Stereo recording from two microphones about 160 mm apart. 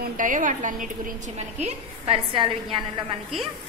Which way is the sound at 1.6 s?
35° right (ahead or behind).